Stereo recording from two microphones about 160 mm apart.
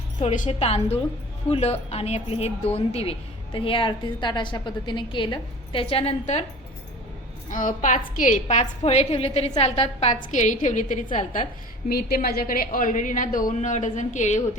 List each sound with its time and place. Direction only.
0.2 s a woman's voice: 45° left (ahead or behind)
7.5 s a woman's voice: 55° left (ahead or behind)
11.9 s a woman's voice: 70° left (ahead or behind); by 14.4 s 50° left (ahead or behind)